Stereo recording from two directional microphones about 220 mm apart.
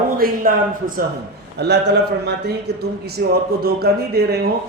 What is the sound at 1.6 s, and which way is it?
A man's voice, 50° right (ahead or behind).